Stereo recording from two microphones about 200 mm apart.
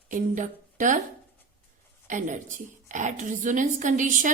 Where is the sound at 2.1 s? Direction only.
40° right (ahead or behind).